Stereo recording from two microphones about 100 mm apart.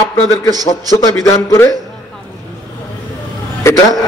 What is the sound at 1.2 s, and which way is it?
Speech, 30° left (ahead or behind).